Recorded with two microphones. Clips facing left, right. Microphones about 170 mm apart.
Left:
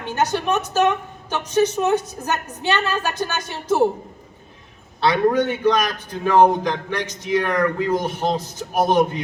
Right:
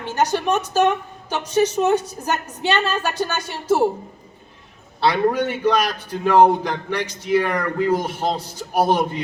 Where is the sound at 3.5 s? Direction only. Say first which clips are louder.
Even; 15° right (ahead or behind).